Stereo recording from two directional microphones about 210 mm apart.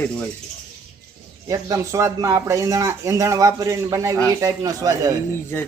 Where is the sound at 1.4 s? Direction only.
15° right (ahead or behind).